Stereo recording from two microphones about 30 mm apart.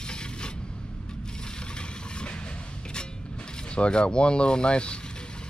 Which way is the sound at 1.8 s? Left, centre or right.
Left.